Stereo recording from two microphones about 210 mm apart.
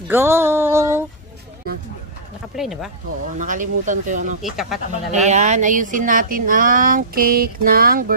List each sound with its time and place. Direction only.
0.1 s a sound: 10° right (ahead or behind)
2.5 s speech: centre (ahead or behind)
3.3 s speech: 40° right (ahead or behind)
4.4 s speech: centre (ahead or behind)
5.1 s speech: 35° right (ahead or behind)